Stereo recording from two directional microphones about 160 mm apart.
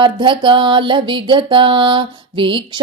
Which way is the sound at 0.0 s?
30° right (ahead or behind).